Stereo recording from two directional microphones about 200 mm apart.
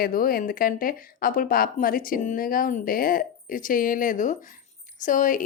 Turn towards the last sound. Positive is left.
turn(degrees=40)  # may be behind; listen again after turning